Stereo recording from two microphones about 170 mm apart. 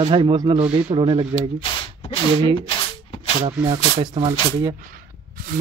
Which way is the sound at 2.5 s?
30° left (ahead or behind).